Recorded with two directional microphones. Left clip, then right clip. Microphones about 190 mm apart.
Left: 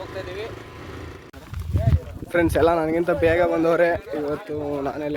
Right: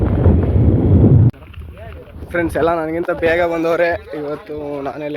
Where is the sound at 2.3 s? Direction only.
Centre (ahead or behind).